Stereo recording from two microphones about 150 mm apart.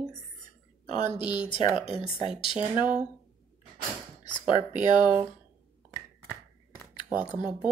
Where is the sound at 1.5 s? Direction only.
35° left (ahead or behind).